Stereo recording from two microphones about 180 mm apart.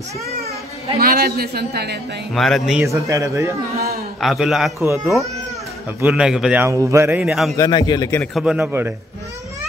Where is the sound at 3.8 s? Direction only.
55° right (ahead or behind).